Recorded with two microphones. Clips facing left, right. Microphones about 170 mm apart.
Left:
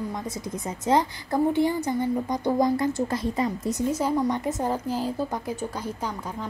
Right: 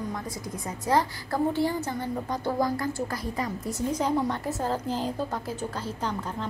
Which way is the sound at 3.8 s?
5° left (ahead or behind).